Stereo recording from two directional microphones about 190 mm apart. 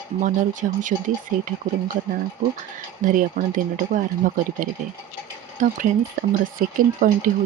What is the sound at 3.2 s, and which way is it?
Speech, 45° right (ahead or behind).